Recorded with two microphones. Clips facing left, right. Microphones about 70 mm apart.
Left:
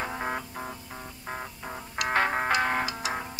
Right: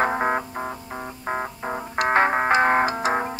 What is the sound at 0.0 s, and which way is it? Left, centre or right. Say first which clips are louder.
Music: right 10 dB; right.